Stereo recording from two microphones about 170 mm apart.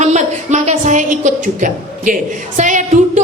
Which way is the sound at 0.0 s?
45° right (ahead or behind).